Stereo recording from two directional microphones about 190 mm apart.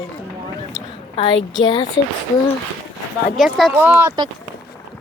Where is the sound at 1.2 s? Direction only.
25° left (ahead or behind).